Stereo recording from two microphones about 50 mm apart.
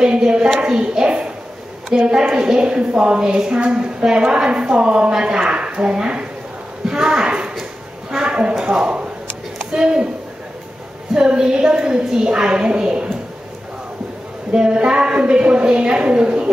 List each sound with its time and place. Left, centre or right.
0.0 s a woman's voice: centre
11.1 s a woman's voice: centre
14.5 s a woman's voice: centre